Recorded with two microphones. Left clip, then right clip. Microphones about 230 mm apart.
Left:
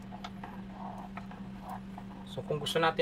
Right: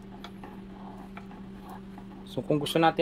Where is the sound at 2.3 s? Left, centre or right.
Right.